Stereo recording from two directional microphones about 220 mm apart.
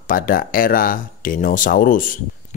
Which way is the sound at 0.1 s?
40° left (ahead or behind).